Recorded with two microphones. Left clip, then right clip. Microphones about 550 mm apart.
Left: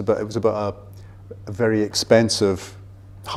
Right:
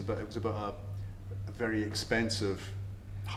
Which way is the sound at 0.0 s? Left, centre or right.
Left.